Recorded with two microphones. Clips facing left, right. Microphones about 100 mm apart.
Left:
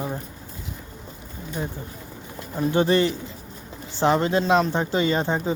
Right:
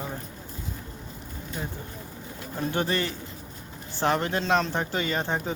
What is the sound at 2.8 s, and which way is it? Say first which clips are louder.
Speech: left 8 dB; 25° left (ahead or behind).